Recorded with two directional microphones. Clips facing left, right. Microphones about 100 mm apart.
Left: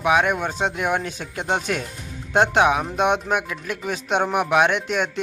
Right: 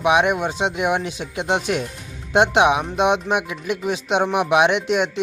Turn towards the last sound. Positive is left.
turn(degrees=-15)  # may be behind; listen again after turning